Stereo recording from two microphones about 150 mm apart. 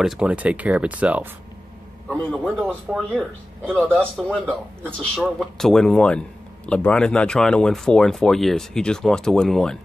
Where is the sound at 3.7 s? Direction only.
15° right (ahead or behind).